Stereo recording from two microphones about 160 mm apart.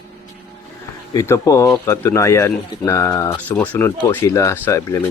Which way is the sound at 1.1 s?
20° left (ahead or behind).